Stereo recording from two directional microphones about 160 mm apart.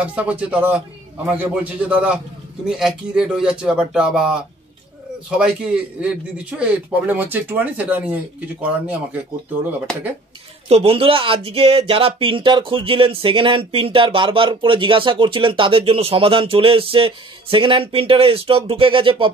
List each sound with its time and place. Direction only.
0.1 s a man's voice: 10° right (ahead or behind)
5.4 s a man's voice: 5° right (ahead or behind)
10.7 s speech: 35° right (ahead or behind)